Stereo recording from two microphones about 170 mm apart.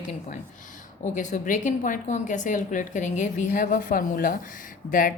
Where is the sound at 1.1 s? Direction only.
45° left (ahead or behind).